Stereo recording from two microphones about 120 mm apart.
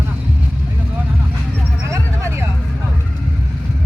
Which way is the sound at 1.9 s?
25° right (ahead or behind).